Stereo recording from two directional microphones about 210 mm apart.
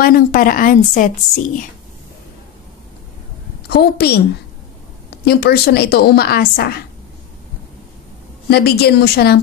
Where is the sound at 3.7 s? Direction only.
50° left (ahead or behind).